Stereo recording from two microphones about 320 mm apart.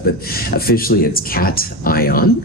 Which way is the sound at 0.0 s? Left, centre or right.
Left.